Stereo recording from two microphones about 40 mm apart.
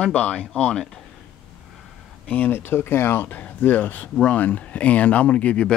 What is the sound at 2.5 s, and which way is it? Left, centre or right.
Speech, left.